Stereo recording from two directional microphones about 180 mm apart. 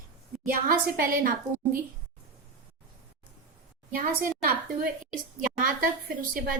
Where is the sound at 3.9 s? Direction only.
50° right (ahead or behind).